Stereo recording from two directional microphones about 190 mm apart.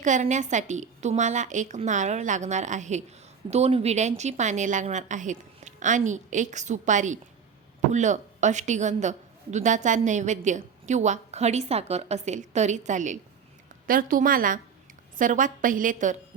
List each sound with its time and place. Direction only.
0.0 s a woman's voice: 40° right (ahead or behind)